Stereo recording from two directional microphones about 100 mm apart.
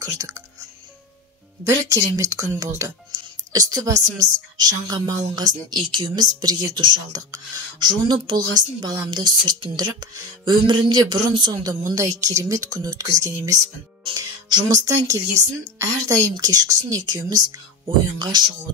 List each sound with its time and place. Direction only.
0.0 s a woman's voice: 35° right (ahead or behind)
1.6 s a woman's voice: 30° right (ahead or behind); by 7.0 s 50° right (ahead or behind)
7.1 s speech: 40° right (ahead or behind)
11.8 s a woman's voice: 30° right (ahead or behind)